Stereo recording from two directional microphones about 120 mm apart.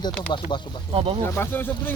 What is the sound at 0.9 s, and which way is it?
Speech, 50° right (ahead or behind).